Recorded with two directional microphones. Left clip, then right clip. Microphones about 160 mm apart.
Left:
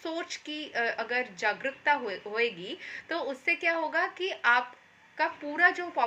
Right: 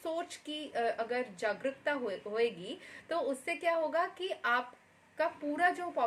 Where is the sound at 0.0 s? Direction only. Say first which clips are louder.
Left 2 dB; 20° right (ahead or behind).